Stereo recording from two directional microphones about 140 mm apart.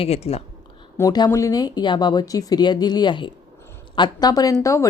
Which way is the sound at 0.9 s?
25° left (ahead or behind).